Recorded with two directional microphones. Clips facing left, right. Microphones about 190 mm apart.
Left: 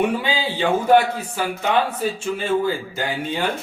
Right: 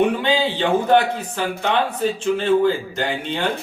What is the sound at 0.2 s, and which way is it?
Speech, 10° left (ahead or behind).